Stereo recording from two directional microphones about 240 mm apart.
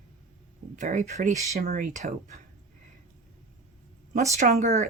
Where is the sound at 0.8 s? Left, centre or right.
Right.